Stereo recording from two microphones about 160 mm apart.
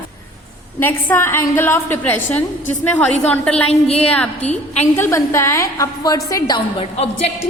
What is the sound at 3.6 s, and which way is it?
A woman's voice, 40° left (ahead or behind).